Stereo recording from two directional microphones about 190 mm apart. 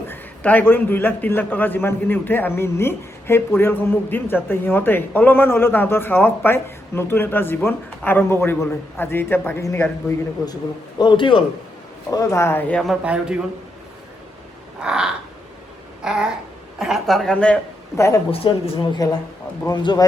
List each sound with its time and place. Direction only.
0.1 s a man's voice: 10° left (ahead or behind)
14.8 s crow: 5° right (ahead or behind)
16.0 s a sound: 5° right (ahead or behind)
16.7 s a man's voice: centre (ahead or behind); by 18.2 s 15° left (ahead or behind)
18.3 s speech: 30° left (ahead or behind)